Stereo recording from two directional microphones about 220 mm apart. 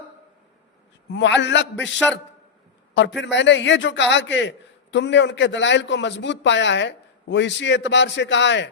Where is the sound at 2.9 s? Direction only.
55° left (ahead or behind).